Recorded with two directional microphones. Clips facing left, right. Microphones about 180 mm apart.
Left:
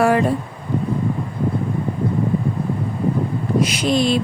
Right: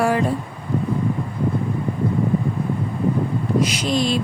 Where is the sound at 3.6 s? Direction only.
60° left (ahead or behind).